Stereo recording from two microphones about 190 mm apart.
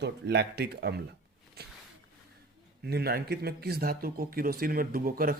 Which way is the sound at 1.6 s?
55° right (ahead or behind).